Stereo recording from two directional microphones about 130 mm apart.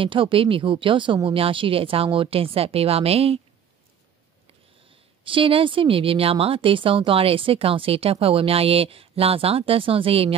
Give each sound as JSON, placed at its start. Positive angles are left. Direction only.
{"t": 0.0, "sound": "speech", "side_deg": -40}
{"t": 5.2, "sound": "speech", "side_deg": -40}